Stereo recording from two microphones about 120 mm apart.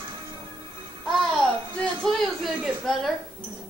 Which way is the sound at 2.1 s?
Centre (ahead or behind).